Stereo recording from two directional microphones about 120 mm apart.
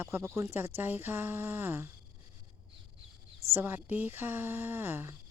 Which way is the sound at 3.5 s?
20° right (ahead or behind).